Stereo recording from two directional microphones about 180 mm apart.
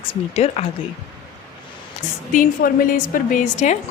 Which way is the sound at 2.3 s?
50° left (ahead or behind).